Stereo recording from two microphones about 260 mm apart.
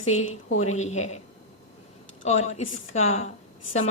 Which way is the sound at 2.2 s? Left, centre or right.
Left.